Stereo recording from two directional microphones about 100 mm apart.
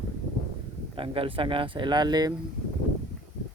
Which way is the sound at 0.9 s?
60° right (ahead or behind).